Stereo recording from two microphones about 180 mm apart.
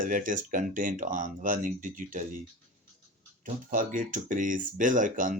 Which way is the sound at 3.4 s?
45° right (ahead or behind).